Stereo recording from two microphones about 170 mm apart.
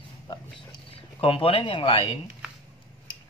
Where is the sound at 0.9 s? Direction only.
35° left (ahead or behind).